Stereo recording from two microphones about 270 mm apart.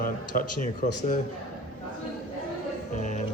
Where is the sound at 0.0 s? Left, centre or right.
Left.